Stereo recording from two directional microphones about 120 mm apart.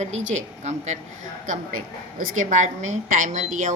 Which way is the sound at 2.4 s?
90° right.